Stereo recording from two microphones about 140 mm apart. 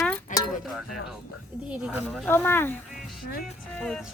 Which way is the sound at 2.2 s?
15° left (ahead or behind).